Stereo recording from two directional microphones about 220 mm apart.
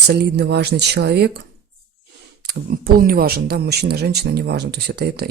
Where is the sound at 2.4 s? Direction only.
40° right (ahead or behind).